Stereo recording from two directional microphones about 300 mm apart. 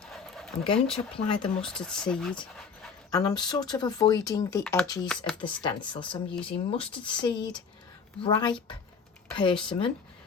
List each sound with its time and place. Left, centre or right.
0.0 s a sound: centre
1.1 s speech: centre
1.6 s speech: centre
5.6 s speech: centre